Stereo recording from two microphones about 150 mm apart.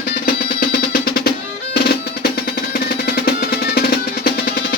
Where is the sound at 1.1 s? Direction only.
90° left.